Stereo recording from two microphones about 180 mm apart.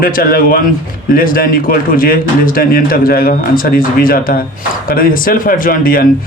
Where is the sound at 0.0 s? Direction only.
55° left (ahead or behind).